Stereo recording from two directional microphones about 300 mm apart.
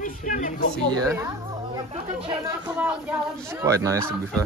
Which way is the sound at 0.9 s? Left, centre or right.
Centre.